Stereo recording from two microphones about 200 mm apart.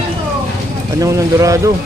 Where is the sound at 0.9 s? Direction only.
15° right (ahead or behind).